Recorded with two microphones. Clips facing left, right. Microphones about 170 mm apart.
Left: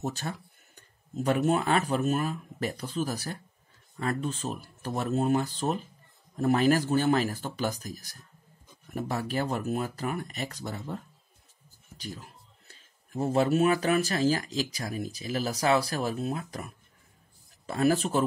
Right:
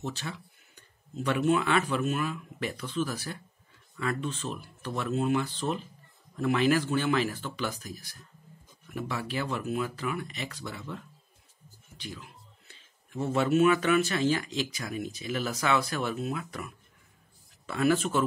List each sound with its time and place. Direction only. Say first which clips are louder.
0.0 s speech: left 3 dB; 45° left (ahead or behind)